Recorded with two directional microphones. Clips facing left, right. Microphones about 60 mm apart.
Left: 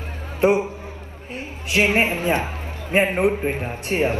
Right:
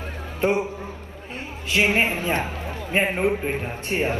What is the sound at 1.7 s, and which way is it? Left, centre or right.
Speech, left.